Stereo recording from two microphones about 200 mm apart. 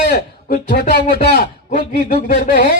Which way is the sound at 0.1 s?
45° left (ahead or behind).